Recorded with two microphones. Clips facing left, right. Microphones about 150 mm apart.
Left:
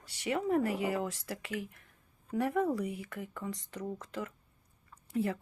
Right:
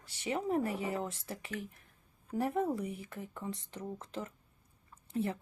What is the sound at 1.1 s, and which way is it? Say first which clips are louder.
Speech: left 3 dB; 75° left (ahead or behind).